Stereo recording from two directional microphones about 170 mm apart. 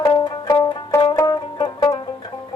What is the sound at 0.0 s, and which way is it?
Music, 20° left (ahead or behind).